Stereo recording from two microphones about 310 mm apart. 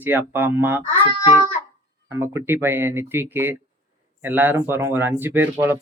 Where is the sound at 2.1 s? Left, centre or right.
Centre.